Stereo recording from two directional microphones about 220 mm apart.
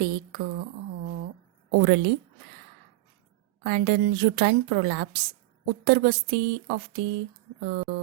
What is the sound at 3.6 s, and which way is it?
Speech, 55° right (ahead or behind).